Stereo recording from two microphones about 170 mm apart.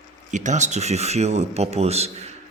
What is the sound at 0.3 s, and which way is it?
Speech, 45° right (ahead or behind).